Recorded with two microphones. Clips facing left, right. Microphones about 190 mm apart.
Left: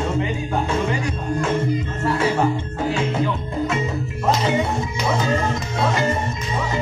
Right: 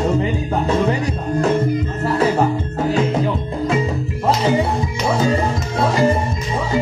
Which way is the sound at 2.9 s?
40° right (ahead or behind).